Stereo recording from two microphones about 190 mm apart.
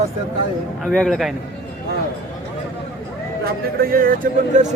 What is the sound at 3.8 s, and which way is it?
Speech, 50° right (ahead or behind).